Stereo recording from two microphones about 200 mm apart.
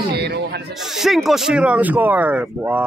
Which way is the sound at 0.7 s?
Centre (ahead or behind).